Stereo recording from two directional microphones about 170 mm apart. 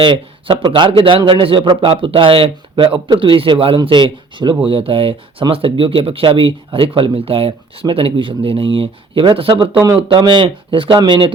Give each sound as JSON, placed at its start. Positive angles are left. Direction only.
{"t": 0.0, "sound": "a man's voice", "side_deg": -25}